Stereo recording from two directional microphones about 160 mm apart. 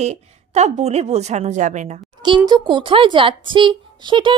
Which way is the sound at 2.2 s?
30° right (ahead or behind).